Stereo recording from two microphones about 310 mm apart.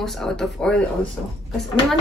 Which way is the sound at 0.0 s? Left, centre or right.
Centre.